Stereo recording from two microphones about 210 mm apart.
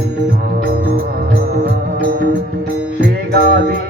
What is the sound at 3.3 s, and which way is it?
Music, 50° right (ahead or behind).